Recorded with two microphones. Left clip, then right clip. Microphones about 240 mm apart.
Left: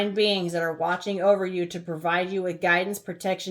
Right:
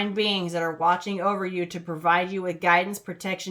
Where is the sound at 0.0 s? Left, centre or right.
Centre.